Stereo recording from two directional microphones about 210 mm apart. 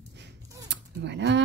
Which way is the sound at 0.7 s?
55° right (ahead or behind).